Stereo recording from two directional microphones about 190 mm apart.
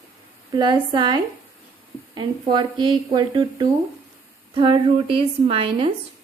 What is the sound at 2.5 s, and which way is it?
A woman's voice, 25° right (ahead or behind).